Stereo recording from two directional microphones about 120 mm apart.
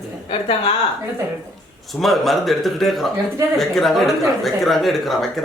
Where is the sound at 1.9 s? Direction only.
Centre (ahead or behind).